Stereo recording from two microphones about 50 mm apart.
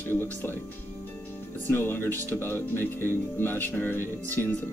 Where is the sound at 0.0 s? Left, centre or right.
Left.